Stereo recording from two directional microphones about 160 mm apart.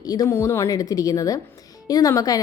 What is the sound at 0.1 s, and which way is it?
A woman's voice, 20° left (ahead or behind).